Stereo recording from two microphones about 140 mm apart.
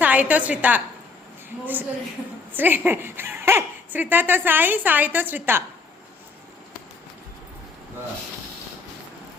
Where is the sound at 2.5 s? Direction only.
15° right (ahead or behind).